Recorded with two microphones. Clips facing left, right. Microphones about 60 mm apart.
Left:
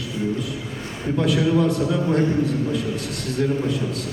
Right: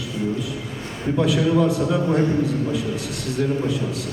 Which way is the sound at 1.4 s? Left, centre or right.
Centre.